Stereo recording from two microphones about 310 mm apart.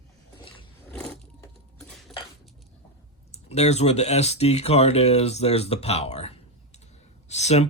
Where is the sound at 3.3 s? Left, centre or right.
Left.